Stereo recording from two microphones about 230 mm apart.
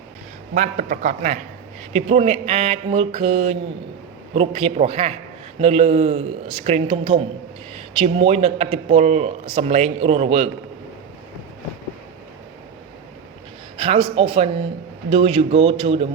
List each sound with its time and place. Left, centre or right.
0.5 s a man's voice: right
13.7 s a man's voice: right